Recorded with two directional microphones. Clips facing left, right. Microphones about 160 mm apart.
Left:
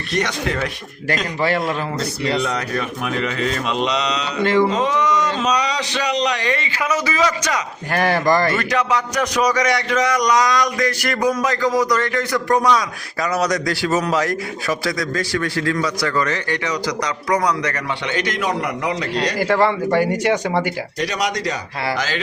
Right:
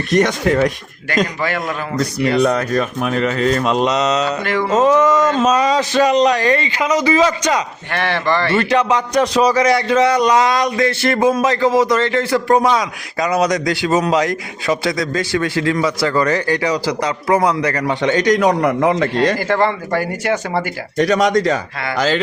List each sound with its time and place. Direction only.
0.1 s a man's voice: 45° right (ahead or behind)
1.4 s speech: 30° left (ahead or behind)
2.4 s a man's voice: 50° right (ahead or behind)
4.4 s speech: 25° left (ahead or behind)
4.7 s a man's voice: 45° right (ahead or behind)
6.7 s a man's voice: 30° right (ahead or behind)
7.9 s speech: 40° left (ahead or behind)
8.5 s a man's voice: 30° right (ahead or behind); by 19.4 s 50° right (ahead or behind)
19.4 s speech: 5° left (ahead or behind)
21.0 s a man's voice: 50° right (ahead or behind)